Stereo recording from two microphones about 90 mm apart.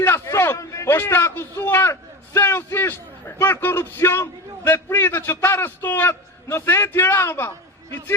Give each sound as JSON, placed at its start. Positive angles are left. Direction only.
{"t": 0.0, "sound": "a man's voice", "side_deg": 30}